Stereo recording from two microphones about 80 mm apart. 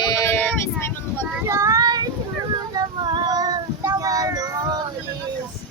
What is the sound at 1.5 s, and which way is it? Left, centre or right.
Child singing, right.